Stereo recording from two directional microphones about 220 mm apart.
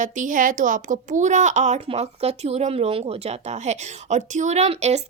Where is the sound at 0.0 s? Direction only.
35° right (ahead or behind).